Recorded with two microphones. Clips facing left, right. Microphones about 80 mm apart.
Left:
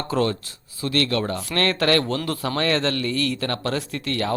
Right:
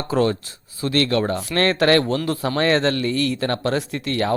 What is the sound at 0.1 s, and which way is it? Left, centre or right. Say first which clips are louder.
Speech: right 4 dB; right.